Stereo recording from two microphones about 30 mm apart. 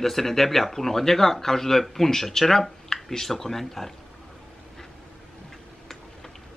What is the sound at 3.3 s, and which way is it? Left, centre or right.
Speech, centre.